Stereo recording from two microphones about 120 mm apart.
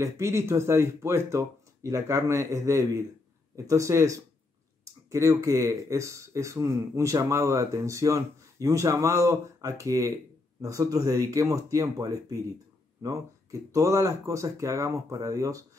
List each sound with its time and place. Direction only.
0.0 s speech: 25° right (ahead or behind)